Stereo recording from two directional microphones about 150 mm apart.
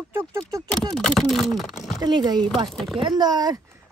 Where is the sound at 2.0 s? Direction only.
30° right (ahead or behind).